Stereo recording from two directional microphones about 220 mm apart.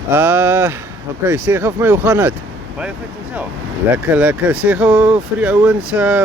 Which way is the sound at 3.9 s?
5° right (ahead or behind).